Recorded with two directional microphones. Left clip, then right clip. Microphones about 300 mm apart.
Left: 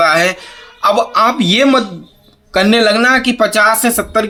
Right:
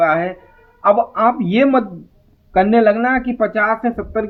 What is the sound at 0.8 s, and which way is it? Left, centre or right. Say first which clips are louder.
Speech: left 3 dB; centre.